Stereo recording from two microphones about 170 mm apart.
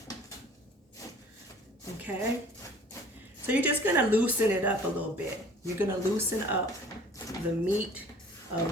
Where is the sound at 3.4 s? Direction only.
10° right (ahead or behind).